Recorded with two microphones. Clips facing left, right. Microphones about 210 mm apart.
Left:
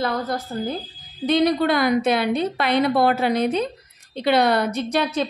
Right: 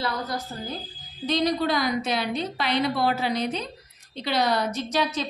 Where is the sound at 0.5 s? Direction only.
45° left (ahead or behind).